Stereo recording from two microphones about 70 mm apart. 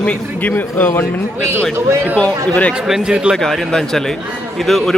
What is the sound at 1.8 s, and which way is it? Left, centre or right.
Speech, right.